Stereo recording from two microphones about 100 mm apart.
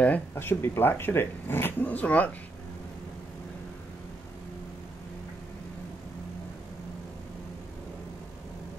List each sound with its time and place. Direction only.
0.0 s speech: 20° left (ahead or behind)